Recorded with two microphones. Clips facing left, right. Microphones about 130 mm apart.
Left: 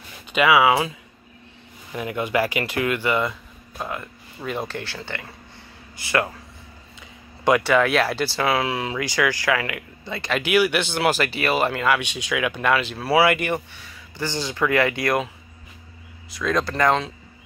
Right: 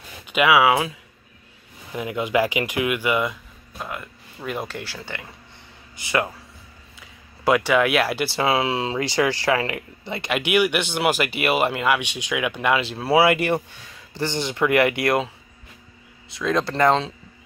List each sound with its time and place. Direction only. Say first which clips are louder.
0.3 s speech: even; 5° right (ahead or behind)
2.0 s speech: right 1 dB; 10° right (ahead or behind)
3.7 s speech: left 2 dB; centre (ahead or behind); by 6.2 s 20° right (ahead or behind)
7.0 s speech: left 3 dB; 10° right (ahead or behind)
8.3 s speech: right 1 dB; 20° right (ahead or behind)
12.8 s speech: right 2 dB; 25° right (ahead or behind)